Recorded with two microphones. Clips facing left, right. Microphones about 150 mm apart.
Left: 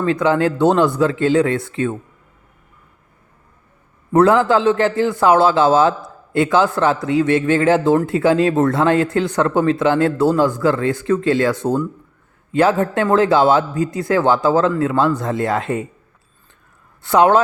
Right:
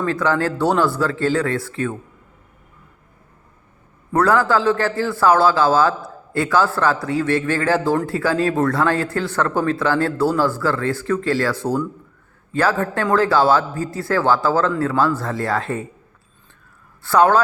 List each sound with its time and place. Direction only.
0.0 s speech: 20° left (ahead or behind)
4.1 s speech: 20° left (ahead or behind)
17.0 s speech: 20° left (ahead or behind)